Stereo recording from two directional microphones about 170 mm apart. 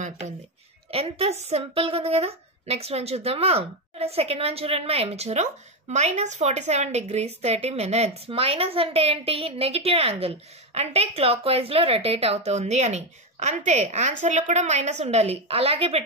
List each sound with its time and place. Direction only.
0.9 s a woman's voice: 35° right (ahead or behind)